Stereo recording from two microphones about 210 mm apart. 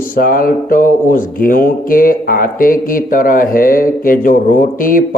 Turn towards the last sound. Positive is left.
turn(degrees=40)  # may be behind; listen again after turning